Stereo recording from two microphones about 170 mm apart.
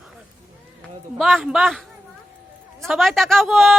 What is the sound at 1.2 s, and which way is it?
Speech, centre (ahead or behind).